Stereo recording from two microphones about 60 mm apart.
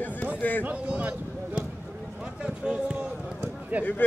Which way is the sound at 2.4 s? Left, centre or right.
Centre.